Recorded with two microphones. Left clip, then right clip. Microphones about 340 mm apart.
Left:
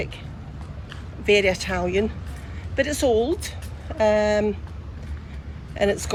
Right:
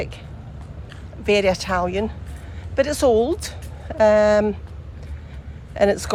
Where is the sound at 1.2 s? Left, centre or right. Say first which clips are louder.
Right 1 dB; centre.